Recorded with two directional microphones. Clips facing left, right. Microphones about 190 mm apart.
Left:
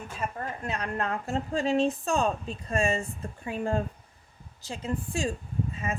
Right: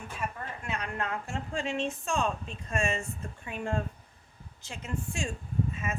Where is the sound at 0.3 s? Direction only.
35° left (ahead or behind).